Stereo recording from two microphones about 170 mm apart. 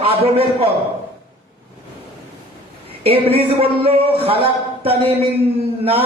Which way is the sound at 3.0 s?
35° right (ahead or behind).